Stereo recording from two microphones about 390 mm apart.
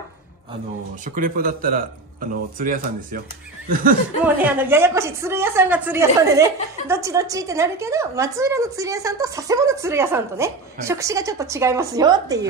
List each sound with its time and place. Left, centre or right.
1.1 s speech: right
4.2 s a woman's voice: centre